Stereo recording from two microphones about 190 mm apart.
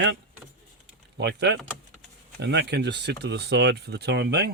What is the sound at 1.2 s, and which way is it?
Speech, 65° right (ahead or behind).